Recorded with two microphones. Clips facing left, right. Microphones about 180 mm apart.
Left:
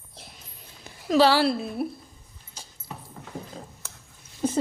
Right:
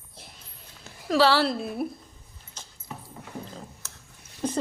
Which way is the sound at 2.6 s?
10° left (ahead or behind).